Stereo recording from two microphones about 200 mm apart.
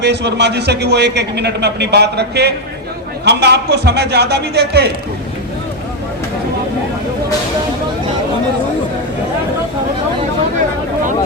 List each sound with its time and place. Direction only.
0.0 s a man's voice: 55° right (ahead or behind)